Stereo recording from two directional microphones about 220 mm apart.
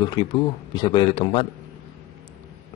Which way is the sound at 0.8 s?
20° left (ahead or behind).